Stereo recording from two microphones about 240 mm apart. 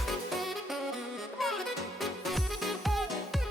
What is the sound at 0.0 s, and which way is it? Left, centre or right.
Music, centre.